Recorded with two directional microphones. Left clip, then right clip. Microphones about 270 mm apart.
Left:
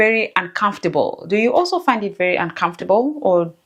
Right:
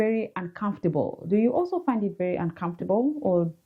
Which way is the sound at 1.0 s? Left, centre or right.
Left.